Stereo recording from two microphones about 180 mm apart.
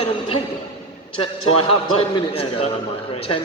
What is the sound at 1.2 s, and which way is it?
A man's voice, 35° left (ahead or behind).